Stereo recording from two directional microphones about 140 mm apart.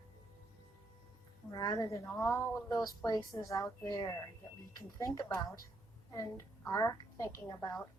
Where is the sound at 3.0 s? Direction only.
30° left (ahead or behind).